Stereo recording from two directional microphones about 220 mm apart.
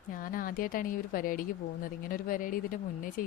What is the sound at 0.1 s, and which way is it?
A woman's voice, 40° left (ahead or behind).